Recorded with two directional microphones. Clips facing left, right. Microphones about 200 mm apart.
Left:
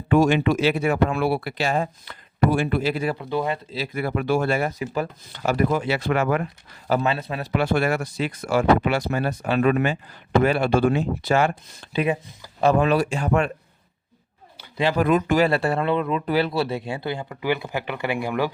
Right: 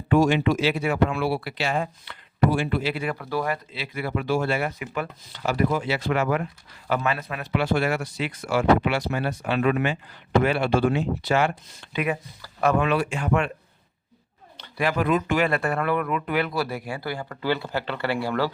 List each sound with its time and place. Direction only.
0.1 s speech: 55° left (ahead or behind)
3.2 s speech: 20° left (ahead or behind)
3.7 s speech: 45° left (ahead or behind)
5.4 s speech: 45° left (ahead or behind)
6.8 s speech: 35° left (ahead or behind)
7.5 s speech: 50° left (ahead or behind)
12.0 s speech: 25° left (ahead or behind); by 13.5 s 40° left (ahead or behind)
14.9 s speech: 45° left (ahead or behind); by 18.5 s 15° left (ahead or behind)